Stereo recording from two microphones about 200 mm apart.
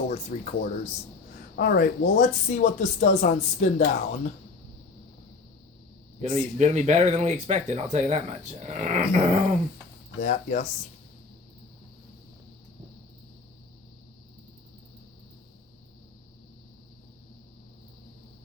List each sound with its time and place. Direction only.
0.1 s speech: 35° left (ahead or behind)
1.5 s speech: 55° left (ahead or behind); by 3.8 s 35° left (ahead or behind)
6.2 s speech: 35° right (ahead or behind)
10.2 s speech: 40° left (ahead or behind)